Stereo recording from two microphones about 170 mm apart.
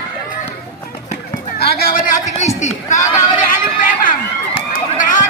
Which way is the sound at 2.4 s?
40° left (ahead or behind).